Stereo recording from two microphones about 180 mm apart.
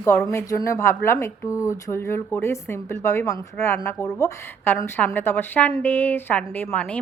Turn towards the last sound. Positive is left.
turn(degrees=5)  # may be behind; listen again after turning